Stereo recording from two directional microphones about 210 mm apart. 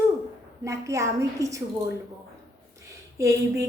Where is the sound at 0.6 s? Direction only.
15° right (ahead or behind).